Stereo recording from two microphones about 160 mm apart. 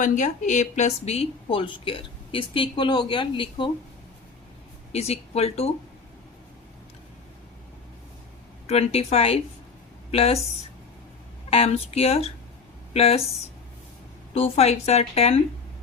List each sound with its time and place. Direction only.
0.0 s a woman's voice: 50° left (ahead or behind); by 3.7 s 30° left (ahead or behind)
4.9 s a woman's voice: 40° left (ahead or behind)
8.6 s a woman's voice: 40° left (ahead or behind)
11.5 s a woman's voice: 40° left (ahead or behind)